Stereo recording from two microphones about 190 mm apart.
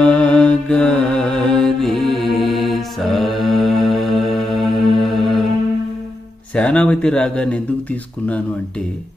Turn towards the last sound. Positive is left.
turn(degrees=5)  # may be behind; listen again after turning